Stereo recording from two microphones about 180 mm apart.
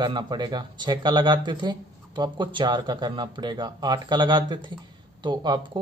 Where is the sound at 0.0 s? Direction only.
25° right (ahead or behind).